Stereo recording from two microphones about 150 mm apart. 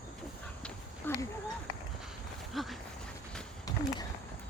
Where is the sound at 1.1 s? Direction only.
15° left (ahead or behind).